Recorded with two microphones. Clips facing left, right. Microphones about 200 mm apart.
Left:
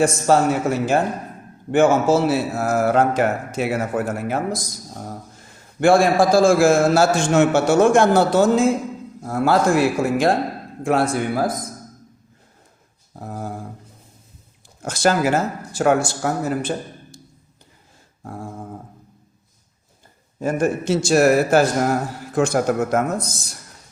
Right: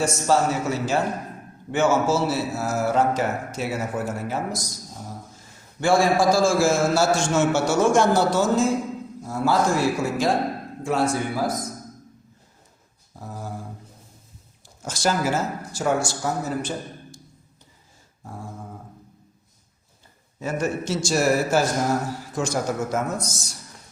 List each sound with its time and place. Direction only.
0.0 s a man's voice: 55° left (ahead or behind)
5.8 s a man's voice: 55° left (ahead or behind)
13.1 s a sound: 55° left (ahead or behind)
14.8 s speech: 60° left (ahead or behind)
20.4 s a man's voice: 50° left (ahead or behind)